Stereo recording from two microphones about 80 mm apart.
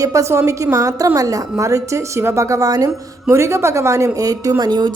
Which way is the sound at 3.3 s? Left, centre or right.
Right.